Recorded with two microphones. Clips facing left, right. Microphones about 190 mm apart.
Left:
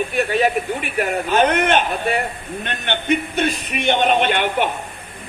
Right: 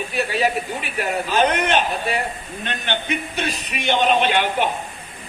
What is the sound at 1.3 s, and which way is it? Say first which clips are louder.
A man's voice: left 3 dB; 55° left (ahead or behind).